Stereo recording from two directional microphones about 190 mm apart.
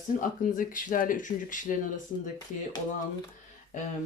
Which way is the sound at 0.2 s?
45° left (ahead or behind).